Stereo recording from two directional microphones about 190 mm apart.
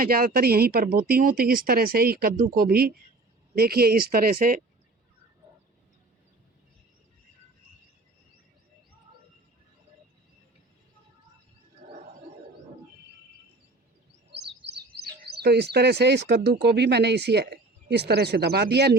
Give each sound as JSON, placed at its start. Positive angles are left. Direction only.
{"t": 0.0, "sound": "speech", "side_deg": -50}
{"t": 11.8, "sound": "a sound", "side_deg": -40}
{"t": 14.3, "sound": "speech", "side_deg": -60}